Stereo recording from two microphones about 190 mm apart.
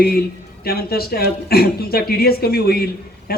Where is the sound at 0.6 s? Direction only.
55° left (ahead or behind).